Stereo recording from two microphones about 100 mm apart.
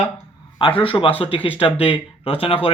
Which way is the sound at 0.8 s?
65° left (ahead or behind).